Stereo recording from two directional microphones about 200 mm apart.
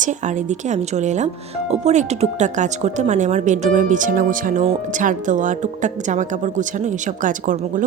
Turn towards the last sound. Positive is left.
turn(degrees=-40)  # may be behind; listen again after turning